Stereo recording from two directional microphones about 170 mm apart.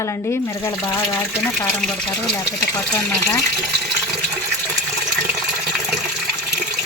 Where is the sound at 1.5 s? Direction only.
5° left (ahead or behind).